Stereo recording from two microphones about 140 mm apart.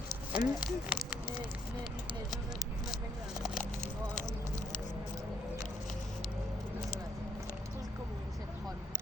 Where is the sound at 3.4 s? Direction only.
Centre (ahead or behind).